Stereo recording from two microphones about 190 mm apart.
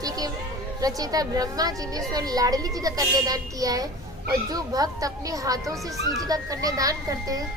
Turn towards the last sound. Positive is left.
turn(degrees=-20)  # may be behind; listen again after turning